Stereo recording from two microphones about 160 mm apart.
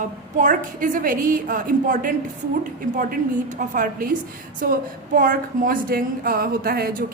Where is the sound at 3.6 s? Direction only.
60° right (ahead or behind).